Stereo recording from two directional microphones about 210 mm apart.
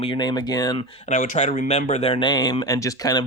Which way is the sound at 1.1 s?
35° left (ahead or behind).